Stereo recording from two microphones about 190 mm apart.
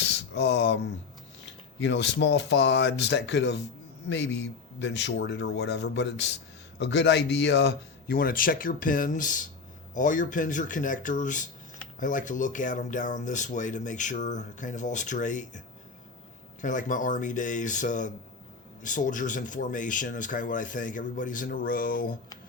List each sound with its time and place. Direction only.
0.0 s speech: 65° left (ahead or behind); by 22.1 s 50° left (ahead or behind)